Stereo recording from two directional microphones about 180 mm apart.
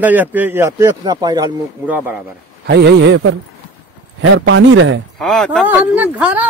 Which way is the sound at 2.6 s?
65° right (ahead or behind).